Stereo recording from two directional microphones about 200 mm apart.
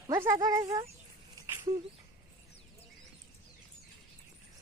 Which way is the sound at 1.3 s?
15° right (ahead or behind).